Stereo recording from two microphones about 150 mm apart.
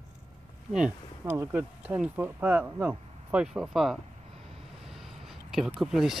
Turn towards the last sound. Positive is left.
turn(degrees=0)  # may be behind; listen again after turning